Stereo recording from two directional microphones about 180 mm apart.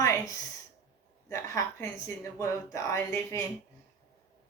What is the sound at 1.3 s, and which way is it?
Speech, 15° left (ahead or behind).